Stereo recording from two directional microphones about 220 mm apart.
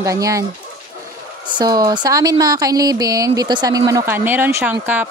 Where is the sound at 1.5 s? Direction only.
15° right (ahead or behind).